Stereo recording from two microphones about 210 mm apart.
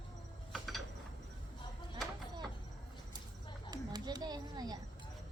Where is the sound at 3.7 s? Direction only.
20° right (ahead or behind).